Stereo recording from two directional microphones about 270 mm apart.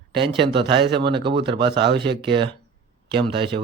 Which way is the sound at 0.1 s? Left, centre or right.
Right.